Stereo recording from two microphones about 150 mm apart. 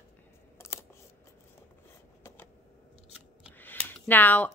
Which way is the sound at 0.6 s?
20° left (ahead or behind).